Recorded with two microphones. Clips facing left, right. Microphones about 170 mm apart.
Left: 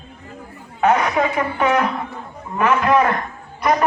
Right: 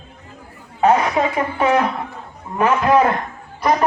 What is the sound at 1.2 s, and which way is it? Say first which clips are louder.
Speech: even; 25° right (ahead or behind).